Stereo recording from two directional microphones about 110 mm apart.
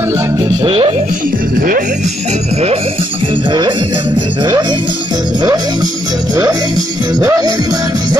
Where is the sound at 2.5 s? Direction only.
75° right (ahead or behind).